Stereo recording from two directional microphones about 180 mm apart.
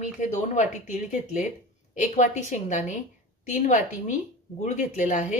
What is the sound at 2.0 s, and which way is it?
A woman's voice, 40° left (ahead or behind).